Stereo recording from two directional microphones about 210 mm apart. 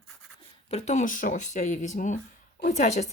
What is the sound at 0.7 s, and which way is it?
Speech, 30° left (ahead or behind).